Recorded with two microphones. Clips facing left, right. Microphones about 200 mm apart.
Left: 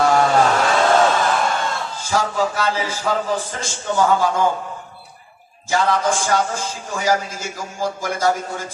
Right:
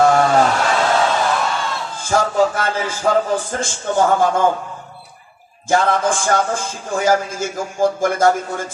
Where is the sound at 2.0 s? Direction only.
50° right (ahead or behind).